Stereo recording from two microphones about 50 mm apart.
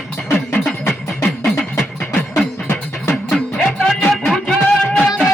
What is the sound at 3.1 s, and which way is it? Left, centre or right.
Music, centre.